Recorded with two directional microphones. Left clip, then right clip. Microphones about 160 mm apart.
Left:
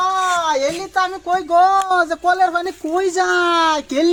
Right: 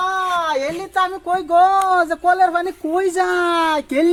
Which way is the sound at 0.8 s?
20° right (ahead or behind).